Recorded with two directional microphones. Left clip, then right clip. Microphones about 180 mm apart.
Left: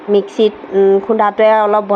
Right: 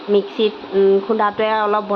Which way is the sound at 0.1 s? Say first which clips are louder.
Left 4 dB; 25° left (ahead or behind).